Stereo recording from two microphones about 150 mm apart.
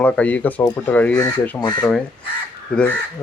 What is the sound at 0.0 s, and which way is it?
Speech, 10° left (ahead or behind).